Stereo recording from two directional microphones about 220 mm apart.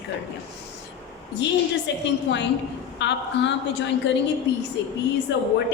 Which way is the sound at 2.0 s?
55° left (ahead or behind).